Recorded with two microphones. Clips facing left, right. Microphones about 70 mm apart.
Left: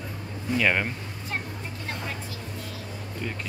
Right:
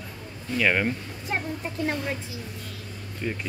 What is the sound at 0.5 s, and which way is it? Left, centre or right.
Speech, centre.